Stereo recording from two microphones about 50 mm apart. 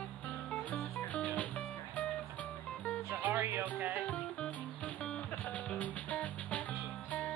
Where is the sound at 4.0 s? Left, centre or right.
Left.